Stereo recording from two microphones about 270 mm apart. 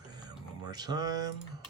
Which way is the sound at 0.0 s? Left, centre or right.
Centre.